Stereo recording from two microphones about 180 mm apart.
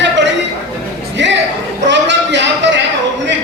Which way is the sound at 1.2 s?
80° right.